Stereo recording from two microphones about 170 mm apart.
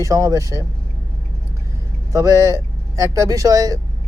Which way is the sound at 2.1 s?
20° right (ahead or behind).